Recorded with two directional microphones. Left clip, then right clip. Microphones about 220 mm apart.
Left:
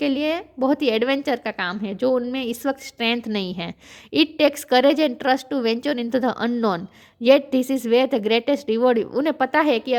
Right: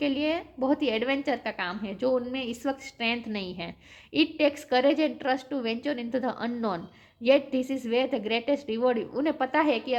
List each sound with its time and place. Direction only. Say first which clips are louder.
0.0 s a woman's voice: left 5 dB; 45° left (ahead or behind)